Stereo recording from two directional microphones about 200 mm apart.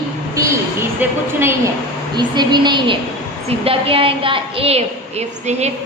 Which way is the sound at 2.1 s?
20° right (ahead or behind).